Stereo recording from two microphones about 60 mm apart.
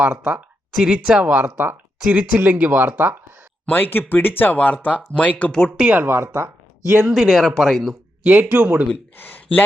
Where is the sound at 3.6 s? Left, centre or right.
Left.